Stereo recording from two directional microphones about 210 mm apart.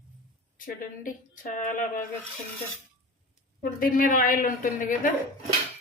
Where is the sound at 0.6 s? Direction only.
40° left (ahead or behind).